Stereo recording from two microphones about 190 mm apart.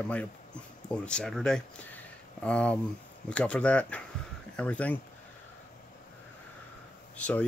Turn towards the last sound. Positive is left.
turn(degrees=5)  # may be behind; listen again after turning